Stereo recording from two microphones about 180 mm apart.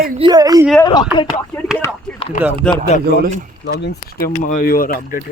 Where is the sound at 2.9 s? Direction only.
40° left (ahead or behind).